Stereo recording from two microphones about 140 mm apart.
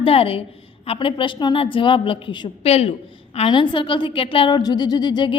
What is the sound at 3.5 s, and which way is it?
A woman's voice, 35° left (ahead or behind).